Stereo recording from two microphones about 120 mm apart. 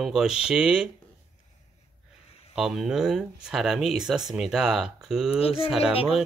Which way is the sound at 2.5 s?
Centre (ahead or behind).